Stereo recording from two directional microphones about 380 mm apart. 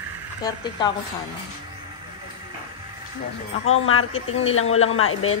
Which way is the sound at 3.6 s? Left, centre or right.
Left.